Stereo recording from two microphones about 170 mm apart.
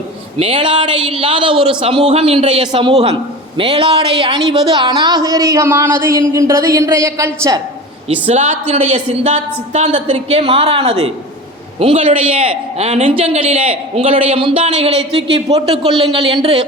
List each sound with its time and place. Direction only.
0.3 s a man's voice: 30° right (ahead or behind)
8.3 s a man's voice: 40° right (ahead or behind)